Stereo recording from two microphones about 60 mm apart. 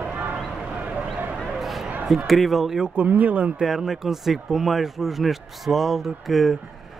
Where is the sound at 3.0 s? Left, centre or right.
Right.